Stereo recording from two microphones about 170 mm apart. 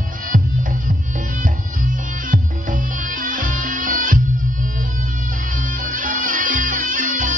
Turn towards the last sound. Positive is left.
turn(degrees=-50)  # may be behind; listen again after turning